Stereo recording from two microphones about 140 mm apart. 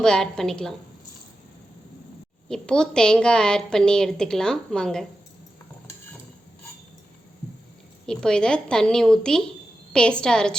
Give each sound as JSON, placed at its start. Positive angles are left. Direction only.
{"t": 0.0, "sound": "a woman's voice", "side_deg": 5}
{"t": 2.5, "sound": "a woman's voice", "side_deg": 5}
{"t": 8.0, "sound": "a woman's voice", "side_deg": 5}